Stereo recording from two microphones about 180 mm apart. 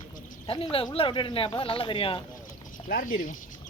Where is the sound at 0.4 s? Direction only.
30° left (ahead or behind).